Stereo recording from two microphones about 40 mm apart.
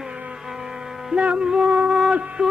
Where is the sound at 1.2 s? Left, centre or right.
Right.